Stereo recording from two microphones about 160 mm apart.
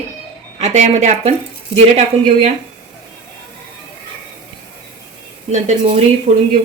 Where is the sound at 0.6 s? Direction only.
45° right (ahead or behind).